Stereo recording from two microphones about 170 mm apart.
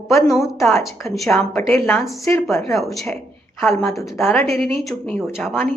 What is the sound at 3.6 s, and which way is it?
Speech, 15° left (ahead or behind).